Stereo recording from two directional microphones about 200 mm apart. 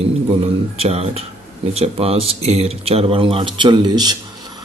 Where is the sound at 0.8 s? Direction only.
30° right (ahead or behind).